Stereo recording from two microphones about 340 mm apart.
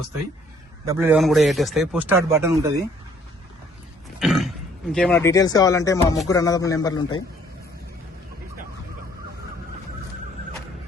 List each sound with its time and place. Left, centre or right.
0.9 s a man's voice: centre
4.2 s speech: centre